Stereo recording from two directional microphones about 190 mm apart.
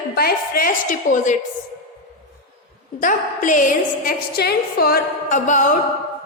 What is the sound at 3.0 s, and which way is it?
A woman's voice, 45° left (ahead or behind).